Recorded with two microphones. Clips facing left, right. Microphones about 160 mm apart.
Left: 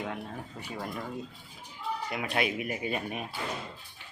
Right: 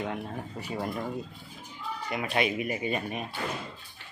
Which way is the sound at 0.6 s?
5° right (ahead or behind).